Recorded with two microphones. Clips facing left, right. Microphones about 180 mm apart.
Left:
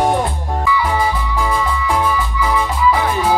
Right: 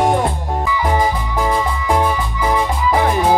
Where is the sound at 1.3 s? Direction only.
40° right (ahead or behind).